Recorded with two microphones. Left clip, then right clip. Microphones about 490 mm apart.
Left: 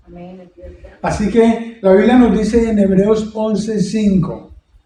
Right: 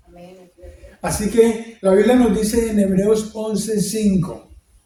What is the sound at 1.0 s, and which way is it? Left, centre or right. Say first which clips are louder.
A man's voice: left 2 dB; right.